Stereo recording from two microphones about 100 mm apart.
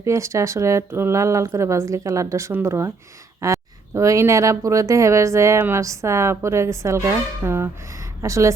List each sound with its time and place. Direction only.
0.0 s speech: 30° right (ahead or behind)